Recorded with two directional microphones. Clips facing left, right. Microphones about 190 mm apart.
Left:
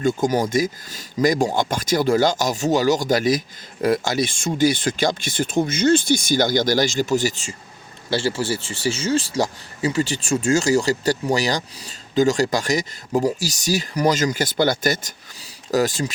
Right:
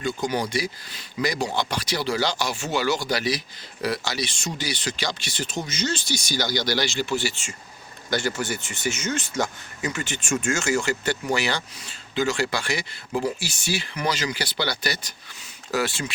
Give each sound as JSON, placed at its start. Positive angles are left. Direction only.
{"t": 0.0, "sound": "speech", "side_deg": 45}
{"t": 8.1, "sound": "speech", "side_deg": 30}